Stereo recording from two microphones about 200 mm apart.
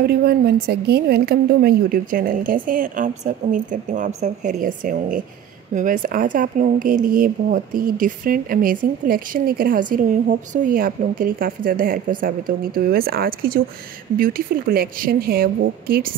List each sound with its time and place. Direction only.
0.0 s a woman's voice: 50° right (ahead or behind)